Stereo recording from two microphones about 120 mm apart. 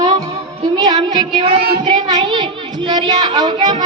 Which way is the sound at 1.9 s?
35° right (ahead or behind).